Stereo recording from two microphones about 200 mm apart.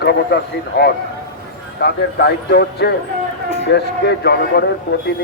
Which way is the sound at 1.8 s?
55° left (ahead or behind).